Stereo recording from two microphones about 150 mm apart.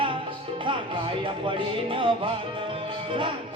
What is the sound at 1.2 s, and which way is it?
Music, 35° right (ahead or behind).